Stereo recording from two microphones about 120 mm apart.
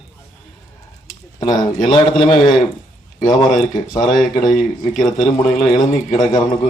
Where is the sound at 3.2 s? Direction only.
90° left.